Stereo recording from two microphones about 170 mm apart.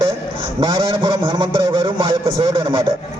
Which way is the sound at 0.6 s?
25° right (ahead or behind).